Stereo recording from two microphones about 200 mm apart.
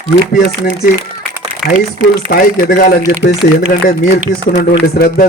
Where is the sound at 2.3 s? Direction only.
45° left (ahead or behind).